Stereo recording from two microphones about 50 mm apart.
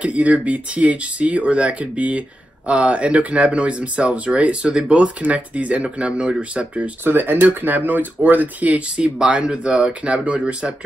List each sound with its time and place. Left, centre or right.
0.0 s speech: right
7.1 s speech: right